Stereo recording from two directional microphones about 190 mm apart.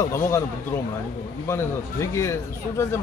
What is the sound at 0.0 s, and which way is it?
Speech, 15° left (ahead or behind).